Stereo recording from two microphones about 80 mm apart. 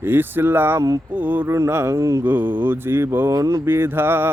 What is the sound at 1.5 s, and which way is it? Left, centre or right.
Speech, right.